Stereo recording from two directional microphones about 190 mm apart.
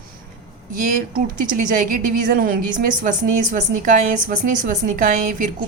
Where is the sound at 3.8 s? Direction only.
45° right (ahead or behind).